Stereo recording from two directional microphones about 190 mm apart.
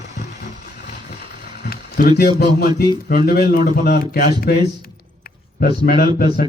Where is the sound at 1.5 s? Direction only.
50° left (ahead or behind).